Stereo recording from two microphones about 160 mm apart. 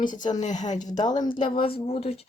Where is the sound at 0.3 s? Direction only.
50° left (ahead or behind).